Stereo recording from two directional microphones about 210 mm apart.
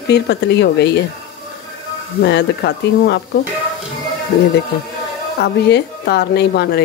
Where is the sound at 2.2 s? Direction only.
55° left (ahead or behind).